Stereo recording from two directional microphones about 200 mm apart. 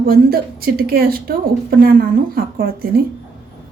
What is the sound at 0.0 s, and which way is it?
A woman's voice, 50° right (ahead or behind).